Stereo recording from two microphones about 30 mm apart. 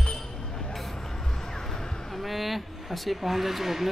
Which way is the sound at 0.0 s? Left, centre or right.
Centre.